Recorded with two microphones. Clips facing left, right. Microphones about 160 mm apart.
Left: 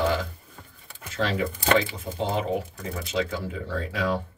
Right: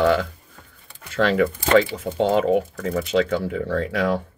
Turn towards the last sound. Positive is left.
turn(degrees=-70)  # may be behind; listen again after turning